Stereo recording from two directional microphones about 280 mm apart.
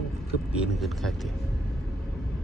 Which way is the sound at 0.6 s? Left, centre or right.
Centre.